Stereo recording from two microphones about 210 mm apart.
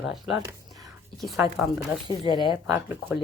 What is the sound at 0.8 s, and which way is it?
Whispering, centre (ahead or behind).